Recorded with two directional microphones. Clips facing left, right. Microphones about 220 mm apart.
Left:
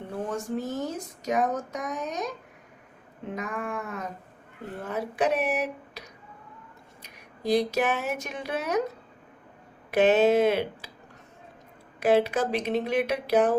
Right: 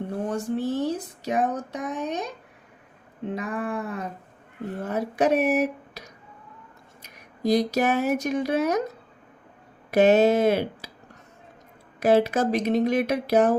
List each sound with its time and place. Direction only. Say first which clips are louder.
0.3 s speech: right 5 dB; 35° right (ahead or behind)
3.3 s speech: right 3 dB; 35° right (ahead or behind)
7.0 s speech: right 6 dB; 40° right (ahead or behind)
9.9 s speech: right 2 dB; 40° right (ahead or behind)
11.9 s speech: right 2 dB; 40° right (ahead or behind)